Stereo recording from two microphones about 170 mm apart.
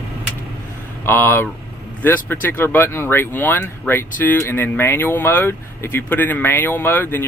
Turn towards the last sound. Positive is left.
turn(degrees=10)  # may be behind; listen again after turning